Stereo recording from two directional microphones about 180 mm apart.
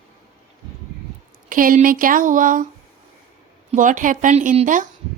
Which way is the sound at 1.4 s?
50° right (ahead or behind).